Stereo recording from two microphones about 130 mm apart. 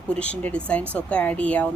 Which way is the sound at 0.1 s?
10° left (ahead or behind).